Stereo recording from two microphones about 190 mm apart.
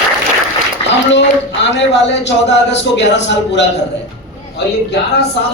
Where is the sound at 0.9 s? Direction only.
70° left (ahead or behind).